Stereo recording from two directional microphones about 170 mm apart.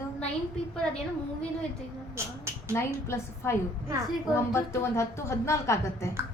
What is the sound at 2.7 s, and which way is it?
A woman's voice, 15° left (ahead or behind).